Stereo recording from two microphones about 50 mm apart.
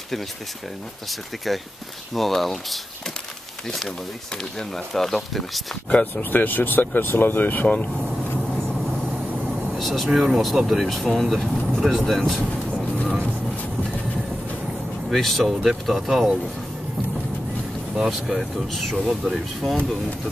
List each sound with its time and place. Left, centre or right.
1.5 s speech: centre
5.9 s speech: left
6.3 s speech: left
7.6 s speech: left
9.8 s speech: centre
15.0 s speech: centre
18.1 s speech: centre